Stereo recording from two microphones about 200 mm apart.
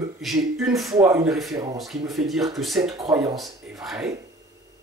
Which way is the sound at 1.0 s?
15° right (ahead or behind).